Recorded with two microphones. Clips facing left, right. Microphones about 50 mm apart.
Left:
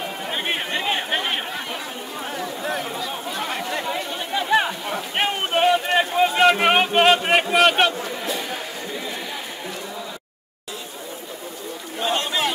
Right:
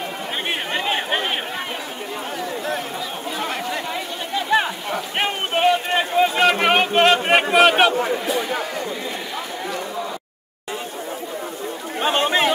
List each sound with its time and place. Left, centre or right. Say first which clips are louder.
0.5 s chatter: right 1 dB; centre
3.3 s chatter: right 2 dB; centre
7.5 s a sound: right 3 dB; centre
12.0 s chatter: right 4 dB; right